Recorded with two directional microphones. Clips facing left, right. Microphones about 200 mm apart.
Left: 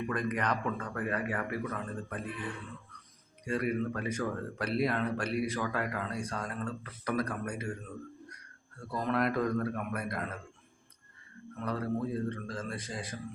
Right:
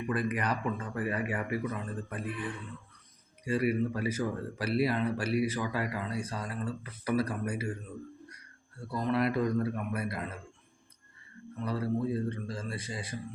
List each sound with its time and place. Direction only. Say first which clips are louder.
0.1 s speech: right 3 dB; 5° right (ahead or behind)
3.4 s speech: right 3 dB; 5° right (ahead or behind)
8.9 s speech: right 1 dB; centre (ahead or behind)
11.5 s speech: right 2 dB; 5° right (ahead or behind)